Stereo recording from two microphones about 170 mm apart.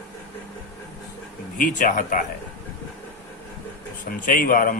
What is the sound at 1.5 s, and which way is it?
Speech, 50° left (ahead or behind).